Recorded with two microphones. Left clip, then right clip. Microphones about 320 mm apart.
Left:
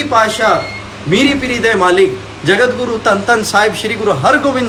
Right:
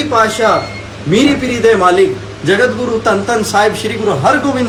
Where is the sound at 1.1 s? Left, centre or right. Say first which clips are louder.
Right 1 dB; centre.